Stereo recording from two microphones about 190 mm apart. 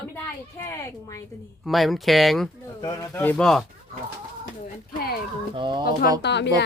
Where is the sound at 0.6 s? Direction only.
15° left (ahead or behind).